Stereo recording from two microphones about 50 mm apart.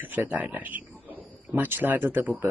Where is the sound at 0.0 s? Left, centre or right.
Right.